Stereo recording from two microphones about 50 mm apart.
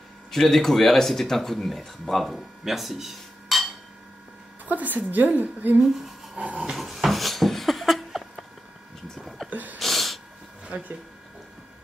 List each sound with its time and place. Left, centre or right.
0.3 s speech: centre
4.6 s a woman's voice: right
6.6 s dog: centre
9.1 s a sound: centre
9.5 s a sound: right
9.8 s snort: centre
10.7 s speech: right